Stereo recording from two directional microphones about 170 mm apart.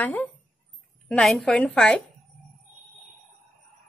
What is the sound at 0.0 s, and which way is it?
A woman's voice, 10° left (ahead or behind).